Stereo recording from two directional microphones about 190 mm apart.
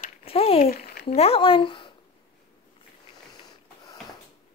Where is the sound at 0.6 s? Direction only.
50° left (ahead or behind).